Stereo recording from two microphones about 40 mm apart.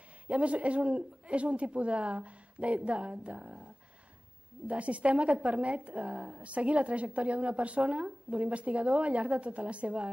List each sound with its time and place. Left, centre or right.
0.3 s a woman's voice: right